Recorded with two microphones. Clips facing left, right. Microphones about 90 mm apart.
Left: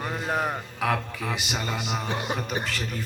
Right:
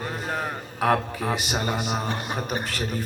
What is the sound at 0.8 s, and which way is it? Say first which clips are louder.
A man's voice: right 6 dB; 45° right (ahead or behind).